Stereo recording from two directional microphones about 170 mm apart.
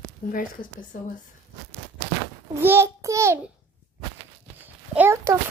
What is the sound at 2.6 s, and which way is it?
Child singing, 15° right (ahead or behind).